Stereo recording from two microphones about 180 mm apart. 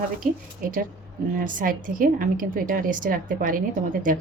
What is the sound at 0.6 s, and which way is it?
Speech, 50° right (ahead or behind).